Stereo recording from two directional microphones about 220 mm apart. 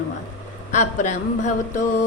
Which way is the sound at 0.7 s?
35° left (ahead or behind).